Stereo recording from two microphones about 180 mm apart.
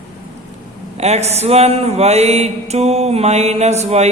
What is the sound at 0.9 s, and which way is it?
Mantra, 35° right (ahead or behind).